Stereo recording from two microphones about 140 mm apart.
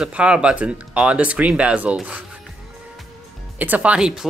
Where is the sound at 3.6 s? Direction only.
10° right (ahead or behind).